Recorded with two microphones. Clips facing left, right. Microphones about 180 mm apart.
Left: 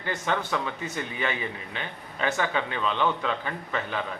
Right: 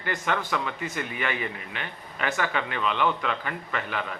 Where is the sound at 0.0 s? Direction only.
25° left (ahead or behind).